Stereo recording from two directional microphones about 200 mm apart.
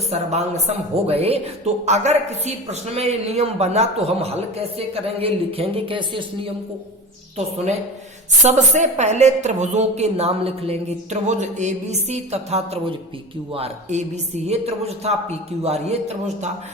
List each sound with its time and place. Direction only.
0.1 s a woman's voice: 35° right (ahead or behind)
8.4 s a woman's voice: 35° right (ahead or behind)